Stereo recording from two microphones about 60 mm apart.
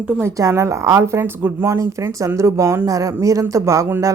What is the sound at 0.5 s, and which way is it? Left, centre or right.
A woman's voice, right.